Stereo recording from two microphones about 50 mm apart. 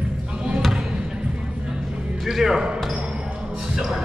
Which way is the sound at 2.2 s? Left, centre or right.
Centre.